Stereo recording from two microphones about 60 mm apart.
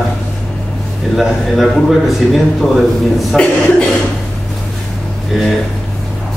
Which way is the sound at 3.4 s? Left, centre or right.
Centre.